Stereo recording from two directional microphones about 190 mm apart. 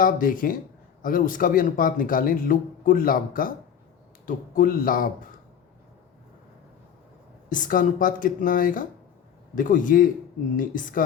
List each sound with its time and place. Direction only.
0.0 s speech: 45° left (ahead or behind)
7.5 s speech: 45° left (ahead or behind)